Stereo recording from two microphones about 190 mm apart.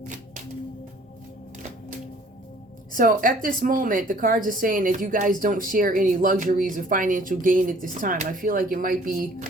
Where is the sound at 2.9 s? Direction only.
45° right (ahead or behind).